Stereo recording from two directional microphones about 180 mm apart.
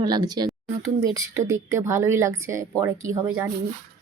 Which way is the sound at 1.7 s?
15° right (ahead or behind).